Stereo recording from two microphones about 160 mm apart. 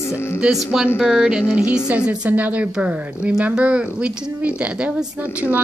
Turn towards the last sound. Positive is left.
turn(degrees=-10)  # may be behind; listen again after turning